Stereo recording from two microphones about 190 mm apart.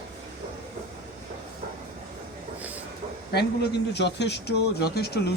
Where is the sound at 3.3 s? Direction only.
60° left (ahead or behind).